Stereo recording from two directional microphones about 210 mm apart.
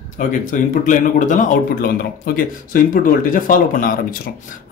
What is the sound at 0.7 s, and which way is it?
A man's voice, 35° left (ahead or behind).